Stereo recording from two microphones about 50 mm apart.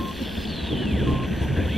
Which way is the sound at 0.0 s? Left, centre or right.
Centre.